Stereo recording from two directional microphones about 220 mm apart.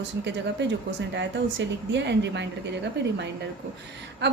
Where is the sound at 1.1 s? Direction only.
55° right (ahead or behind).